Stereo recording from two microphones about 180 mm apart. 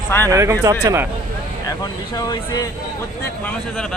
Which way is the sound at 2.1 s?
20° left (ahead or behind).